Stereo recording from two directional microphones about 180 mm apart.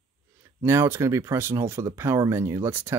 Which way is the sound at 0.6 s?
15° right (ahead or behind).